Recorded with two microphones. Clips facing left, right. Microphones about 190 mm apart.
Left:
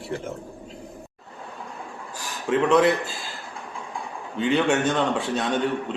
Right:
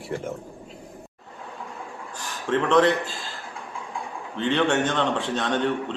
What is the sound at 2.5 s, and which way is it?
Speech, 10° left (ahead or behind).